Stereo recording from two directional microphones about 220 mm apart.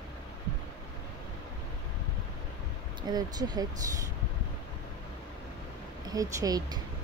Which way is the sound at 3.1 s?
15° right (ahead or behind).